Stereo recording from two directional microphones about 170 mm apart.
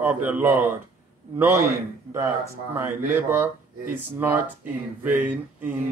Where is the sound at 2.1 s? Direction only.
15° right (ahead or behind).